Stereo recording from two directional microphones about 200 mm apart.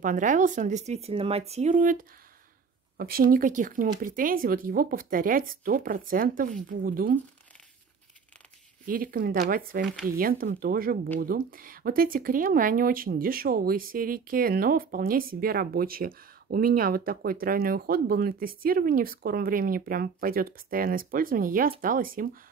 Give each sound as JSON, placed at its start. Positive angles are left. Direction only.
{"t": 0.0, "sound": "speech", "side_deg": -40}
{"t": 8.8, "sound": "speech", "side_deg": -45}